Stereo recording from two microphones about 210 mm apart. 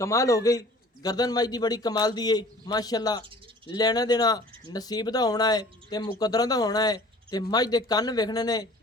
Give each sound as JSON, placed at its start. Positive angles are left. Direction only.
{"t": 0.0, "sound": "a man's voice", "side_deg": 15}